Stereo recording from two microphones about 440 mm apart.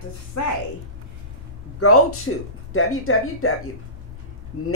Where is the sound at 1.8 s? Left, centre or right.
Left.